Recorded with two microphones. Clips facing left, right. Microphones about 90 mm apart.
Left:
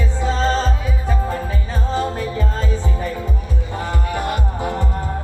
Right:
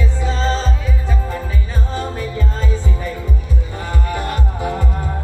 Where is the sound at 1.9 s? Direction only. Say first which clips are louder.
Left 4 dB; 35° left (ahead or behind).